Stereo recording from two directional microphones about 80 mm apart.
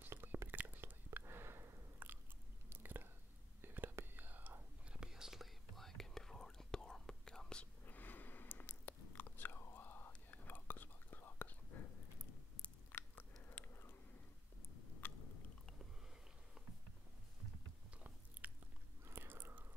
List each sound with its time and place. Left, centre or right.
0.0 s whispering: right
2.7 s chewing: right
3.6 s whispering: right; by 7.6 s centre
7.8 s biting: left
11.7 s a sound: left
13.1 s chewing: left
15.0 s chewing: left
17.9 s biting: centre